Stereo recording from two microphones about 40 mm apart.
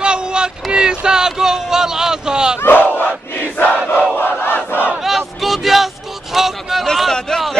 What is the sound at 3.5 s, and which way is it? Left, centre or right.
Crowd, left.